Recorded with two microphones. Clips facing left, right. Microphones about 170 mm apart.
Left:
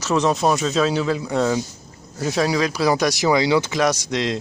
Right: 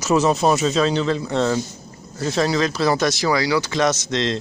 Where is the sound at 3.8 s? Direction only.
10° left (ahead or behind).